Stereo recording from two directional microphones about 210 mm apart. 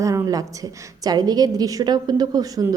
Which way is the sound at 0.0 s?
15° right (ahead or behind).